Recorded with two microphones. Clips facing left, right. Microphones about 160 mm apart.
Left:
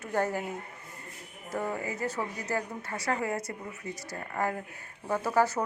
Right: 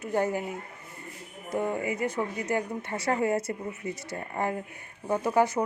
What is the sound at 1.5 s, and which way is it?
Speech, 20° right (ahead or behind).